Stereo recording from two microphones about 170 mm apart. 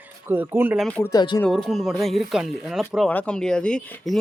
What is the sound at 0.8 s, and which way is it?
Speech, 5° left (ahead or behind).